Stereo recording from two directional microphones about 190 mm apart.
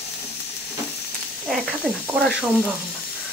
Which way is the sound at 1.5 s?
5° right (ahead or behind).